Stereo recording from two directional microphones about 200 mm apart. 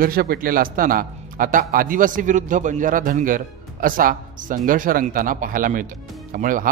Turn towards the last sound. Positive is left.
turn(degrees=-40)  # may be behind; listen again after turning